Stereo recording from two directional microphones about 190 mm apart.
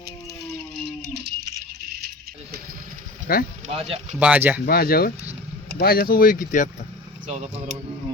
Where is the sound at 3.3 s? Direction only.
50° left (ahead or behind).